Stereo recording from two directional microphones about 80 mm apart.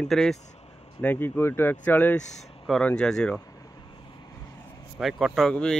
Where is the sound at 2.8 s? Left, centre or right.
Centre.